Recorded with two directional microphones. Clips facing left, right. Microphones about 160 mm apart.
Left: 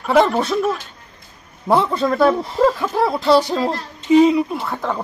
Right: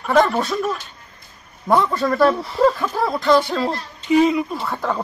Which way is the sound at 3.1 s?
35° left (ahead or behind).